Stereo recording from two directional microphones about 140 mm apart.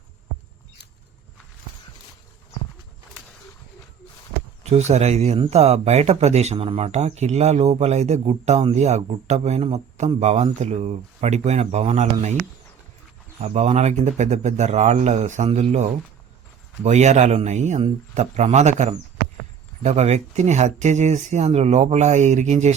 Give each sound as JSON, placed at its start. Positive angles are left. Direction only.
{"t": 4.7, "sound": "speech", "side_deg": -50}
{"t": 13.4, "sound": "speech", "side_deg": -50}